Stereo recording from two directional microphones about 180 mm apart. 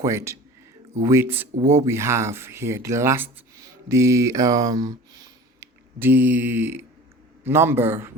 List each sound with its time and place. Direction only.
0.0 s speech: 15° right (ahead or behind)
3.8 s mantra: 15° right (ahead or behind)
5.5 s speech: 10° right (ahead or behind)